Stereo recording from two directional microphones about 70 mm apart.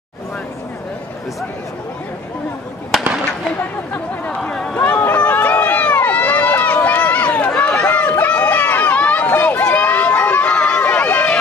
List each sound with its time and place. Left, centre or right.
4.5 s a sound: centre
4.7 s run: left
7.8 s run: left